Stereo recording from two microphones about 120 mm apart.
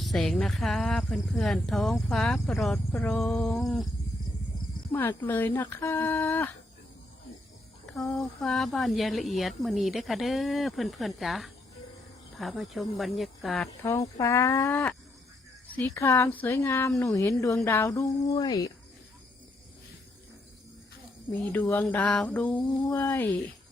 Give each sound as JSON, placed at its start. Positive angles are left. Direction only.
{"t": 0.0, "sound": "a woman's voice", "side_deg": 5}
{"t": 2.7, "sound": "a woman's voice", "side_deg": 15}
{"t": 4.9, "sound": "speech", "side_deg": 15}
{"t": 7.9, "sound": "a woman's voice", "side_deg": 5}
{"t": 13.8, "sound": "speech", "side_deg": 25}
{"t": 17.9, "sound": "speech", "side_deg": 30}
{"t": 21.5, "sound": "speech", "side_deg": 15}